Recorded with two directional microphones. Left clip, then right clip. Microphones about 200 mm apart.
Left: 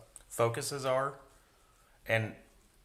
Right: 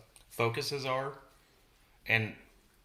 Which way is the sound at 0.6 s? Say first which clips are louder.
Left 2 dB; 15° left (ahead or behind).